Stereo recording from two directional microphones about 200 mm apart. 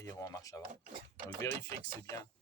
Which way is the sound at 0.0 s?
15° left (ahead or behind).